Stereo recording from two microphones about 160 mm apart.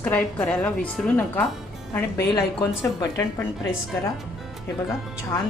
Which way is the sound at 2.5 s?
20° left (ahead or behind).